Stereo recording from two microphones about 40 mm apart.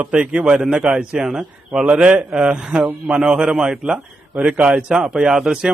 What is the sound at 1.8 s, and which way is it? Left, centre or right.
Speech, right.